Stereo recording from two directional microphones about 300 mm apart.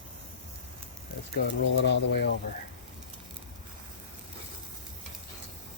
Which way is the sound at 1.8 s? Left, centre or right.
Left.